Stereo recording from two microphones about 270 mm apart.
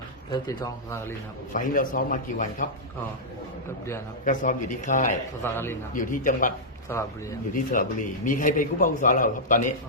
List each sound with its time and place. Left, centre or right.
0.3 s speech: centre
1.5 s a man's voice: left
4.9 s a man's voice: left
5.4 s speech: centre
5.9 s a man's voice: left
6.9 s speech: centre
7.5 s a man's voice: left